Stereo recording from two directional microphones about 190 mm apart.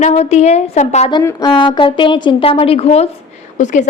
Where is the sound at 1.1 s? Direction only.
15° left (ahead or behind).